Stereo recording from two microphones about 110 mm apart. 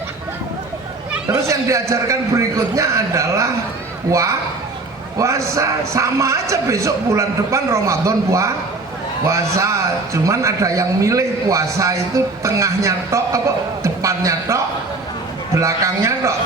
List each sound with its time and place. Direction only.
1.3 s a man's voice: 25° right (ahead or behind)